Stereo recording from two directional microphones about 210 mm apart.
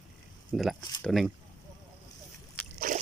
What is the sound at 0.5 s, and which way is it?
Speech, centre (ahead or behind).